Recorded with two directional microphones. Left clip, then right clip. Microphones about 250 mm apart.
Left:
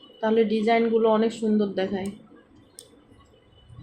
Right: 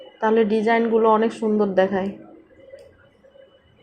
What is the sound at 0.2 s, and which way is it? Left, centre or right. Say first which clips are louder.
A woman's voice: right 4 dB; centre.